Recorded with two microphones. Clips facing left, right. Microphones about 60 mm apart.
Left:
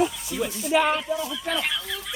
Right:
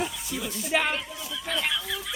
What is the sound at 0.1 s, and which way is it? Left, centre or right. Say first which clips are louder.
Speech: left 4 dB; centre.